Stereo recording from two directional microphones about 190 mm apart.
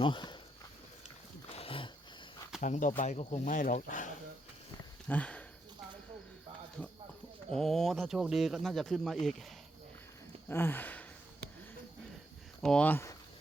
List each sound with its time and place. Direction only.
0.0 s speech: 25° left (ahead or behind)
1.5 s a sound: 30° left (ahead or behind)
2.6 s speech: 40° left (ahead or behind)
5.0 s speech: 5° left (ahead or behind)
7.5 s speech: centre (ahead or behind)
10.5 s speech: 10° left (ahead or behind)
12.6 s speech: 5° left (ahead or behind)